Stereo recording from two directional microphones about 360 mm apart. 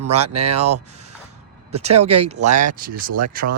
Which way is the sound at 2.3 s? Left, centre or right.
Centre.